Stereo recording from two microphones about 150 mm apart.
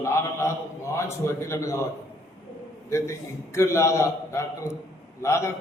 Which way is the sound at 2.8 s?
20° left (ahead or behind).